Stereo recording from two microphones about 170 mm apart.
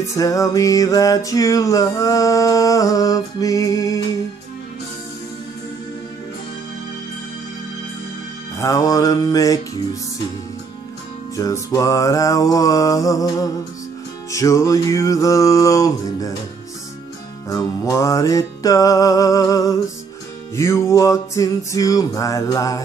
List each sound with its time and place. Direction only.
0.1 s music: 20° left (ahead or behind)
8.5 s music: 20° left (ahead or behind)
11.3 s music: 20° left (ahead or behind)
17.5 s music: 20° left (ahead or behind)